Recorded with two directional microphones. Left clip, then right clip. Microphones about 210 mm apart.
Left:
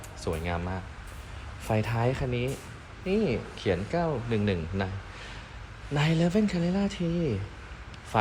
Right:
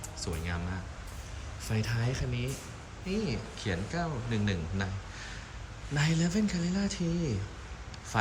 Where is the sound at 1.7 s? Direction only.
15° left (ahead or behind).